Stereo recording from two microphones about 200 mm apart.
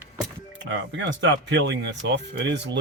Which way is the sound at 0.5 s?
65° right (ahead or behind).